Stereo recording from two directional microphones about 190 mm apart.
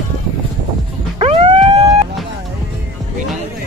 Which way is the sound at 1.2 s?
30° right (ahead or behind).